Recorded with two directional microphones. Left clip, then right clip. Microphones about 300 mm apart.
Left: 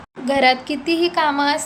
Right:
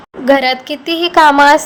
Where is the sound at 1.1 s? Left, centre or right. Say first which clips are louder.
Right 16 dB; right.